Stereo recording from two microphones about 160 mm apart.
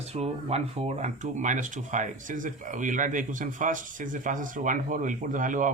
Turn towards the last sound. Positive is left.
turn(degrees=-55)  # may be behind; listen again after turning